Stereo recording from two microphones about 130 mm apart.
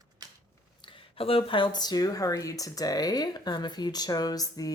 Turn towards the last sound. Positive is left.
turn(degrees=30)  # may be behind; listen again after turning